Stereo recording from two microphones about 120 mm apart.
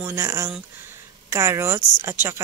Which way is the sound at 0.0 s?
20° right (ahead or behind).